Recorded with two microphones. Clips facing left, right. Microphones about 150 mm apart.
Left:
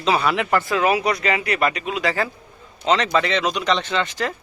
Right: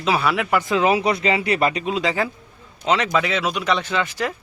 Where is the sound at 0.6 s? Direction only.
15° right (ahead or behind).